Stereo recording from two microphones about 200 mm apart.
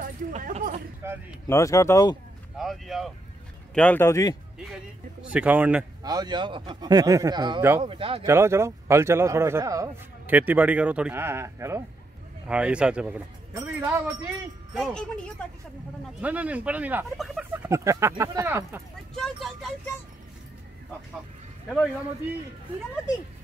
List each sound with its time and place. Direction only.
0.0 s speech: 40° right (ahead or behind)
1.0 s a man's voice: 10° right (ahead or behind)
1.5 s speech: 15° left (ahead or behind)
2.5 s speech: centre (ahead or behind); by 4.4 s 15° left (ahead or behind)
5.3 s a man's voice: 5° right (ahead or behind)
6.0 s speech: 20° right (ahead or behind)
8.3 s a man's voice: 15° right (ahead or behind); by 15.4 s 5° left (ahead or behind)
16.2 s a man's voice: 5° right (ahead or behind)
19.1 s speech: centre (ahead or behind)